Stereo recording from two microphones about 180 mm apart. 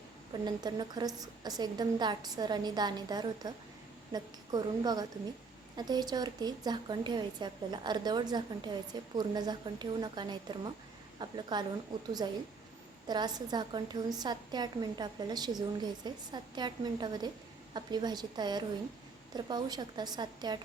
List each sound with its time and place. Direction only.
0.4 s a woman's voice: 25° right (ahead or behind)
13.1 s a woman's voice: 25° right (ahead or behind)